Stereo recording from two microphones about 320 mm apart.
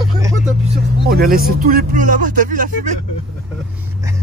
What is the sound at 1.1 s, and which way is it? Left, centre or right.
Speech, right.